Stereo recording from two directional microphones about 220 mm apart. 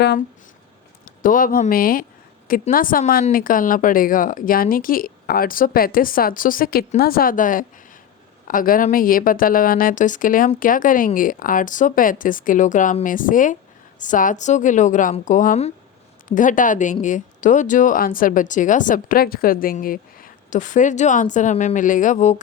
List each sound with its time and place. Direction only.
1.0 s speech: 40° left (ahead or behind)